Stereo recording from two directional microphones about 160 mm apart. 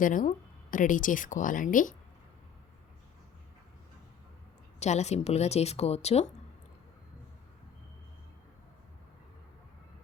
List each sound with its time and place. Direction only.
0.0 s speech: 55° left (ahead or behind)
4.8 s speech: 45° left (ahead or behind)